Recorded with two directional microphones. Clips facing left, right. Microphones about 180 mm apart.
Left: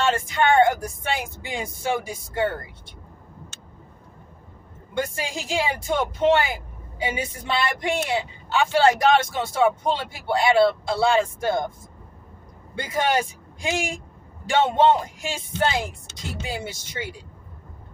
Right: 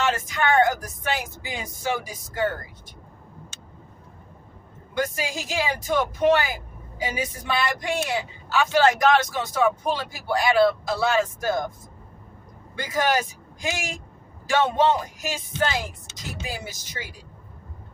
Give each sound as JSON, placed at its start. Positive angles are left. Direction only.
{"t": 0.0, "sound": "a woman's voice", "side_deg": 25}
{"t": 4.9, "sound": "a woman's voice", "side_deg": 25}
{"t": 12.7, "sound": "a woman's voice", "side_deg": 25}